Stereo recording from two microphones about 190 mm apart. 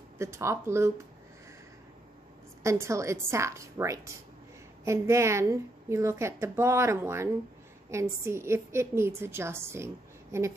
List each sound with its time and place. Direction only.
0.2 s a woman's voice: 15° right (ahead or behind)
2.6 s a woman's voice: 15° right (ahead or behind)